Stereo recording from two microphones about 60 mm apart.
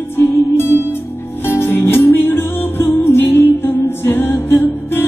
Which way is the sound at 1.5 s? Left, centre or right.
Left.